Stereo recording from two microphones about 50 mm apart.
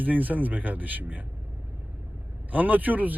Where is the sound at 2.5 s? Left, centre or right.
Right.